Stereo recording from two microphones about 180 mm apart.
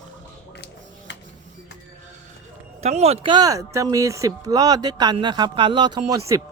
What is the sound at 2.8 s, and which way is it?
Speech, 35° right (ahead or behind).